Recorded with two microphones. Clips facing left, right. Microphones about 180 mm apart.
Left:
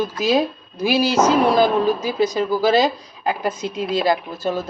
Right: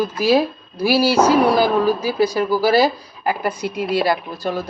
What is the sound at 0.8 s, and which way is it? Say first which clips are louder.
Speech: right 2 dB; 20° left (ahead or behind).